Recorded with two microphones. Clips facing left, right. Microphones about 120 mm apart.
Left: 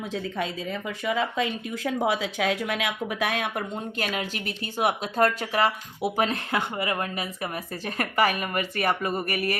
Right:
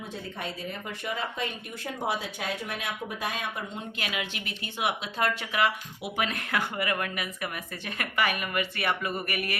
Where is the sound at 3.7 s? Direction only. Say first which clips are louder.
Left 5 dB; 40° left (ahead or behind).